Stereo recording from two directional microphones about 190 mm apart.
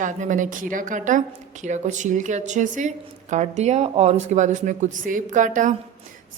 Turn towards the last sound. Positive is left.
turn(degrees=-40)  # may be behind; listen again after turning